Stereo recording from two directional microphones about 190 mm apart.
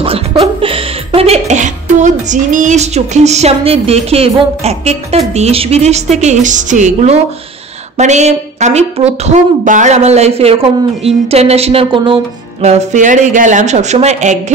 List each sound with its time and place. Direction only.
0.0 s speech: 30° right (ahead or behind)
12.6 s speech: 40° right (ahead or behind)